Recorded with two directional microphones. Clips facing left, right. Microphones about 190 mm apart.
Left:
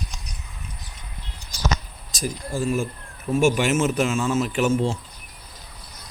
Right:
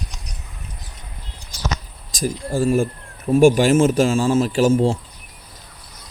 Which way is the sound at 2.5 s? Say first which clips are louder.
Right 6 dB; 35° right (ahead or behind).